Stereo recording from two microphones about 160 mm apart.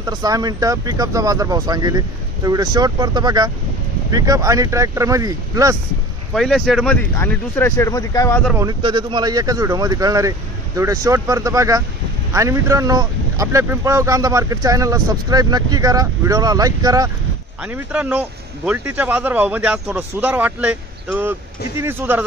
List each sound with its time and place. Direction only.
0.0 s speech: 25° right (ahead or behind)
6.3 s speech: centre (ahead or behind); by 8.4 s 20° left (ahead or behind)
8.5 s speech: 25° right (ahead or behind)
17.7 s a man's voice: 10° right (ahead or behind)